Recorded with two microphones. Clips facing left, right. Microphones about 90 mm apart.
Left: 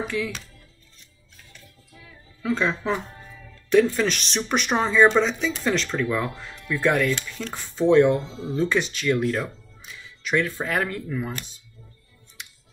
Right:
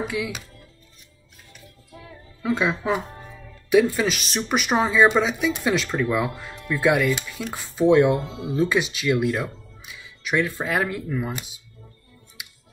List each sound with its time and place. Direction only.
0.0 s speech: 10° right (ahead or behind)
2.4 s speech: 10° right (ahead or behind)
8.2 s speech: 55° right (ahead or behind)
8.5 s speech: 5° right (ahead or behind)
12.4 s music: 5° right (ahead or behind)